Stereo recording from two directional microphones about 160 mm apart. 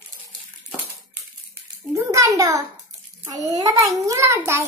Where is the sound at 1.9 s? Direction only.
20° right (ahead or behind).